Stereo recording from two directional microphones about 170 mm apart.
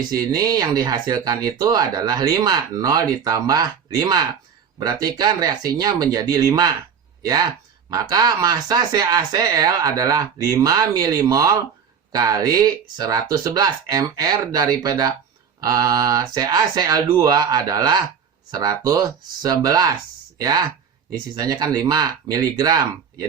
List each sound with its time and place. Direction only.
0.1 s speech: 20° right (ahead or behind)